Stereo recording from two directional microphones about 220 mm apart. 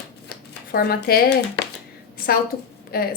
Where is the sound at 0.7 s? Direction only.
45° left (ahead or behind).